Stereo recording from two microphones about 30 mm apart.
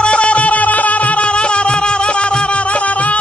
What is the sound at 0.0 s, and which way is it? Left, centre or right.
Music, left.